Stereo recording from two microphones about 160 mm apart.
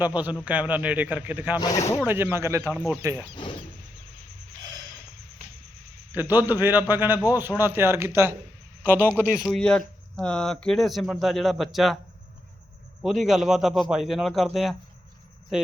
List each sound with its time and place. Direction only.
0.0 s a man's voice: 10° right (ahead or behind)
1.5 s speech: 25° left (ahead or behind)
2.0 s a man's voice: 15° right (ahead or behind)
6.1 s a man's voice: 10° right (ahead or behind)
13.0 s speech: centre (ahead or behind)